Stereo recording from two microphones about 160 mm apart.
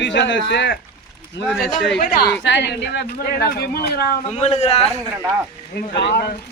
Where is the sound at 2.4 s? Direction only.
90° left; by 4.1 s 75° left (ahead or behind).